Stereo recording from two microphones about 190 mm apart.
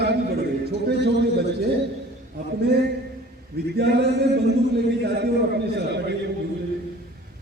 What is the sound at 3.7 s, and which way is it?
A man's voice, 60° right (ahead or behind).